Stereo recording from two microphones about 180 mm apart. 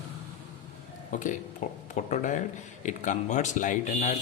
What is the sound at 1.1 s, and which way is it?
Speech, 45° left (ahead or behind).